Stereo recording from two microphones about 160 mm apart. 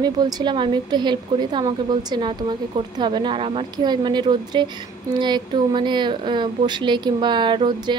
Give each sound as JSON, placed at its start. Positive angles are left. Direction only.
{"t": 0.0, "sound": "speech", "side_deg": -25}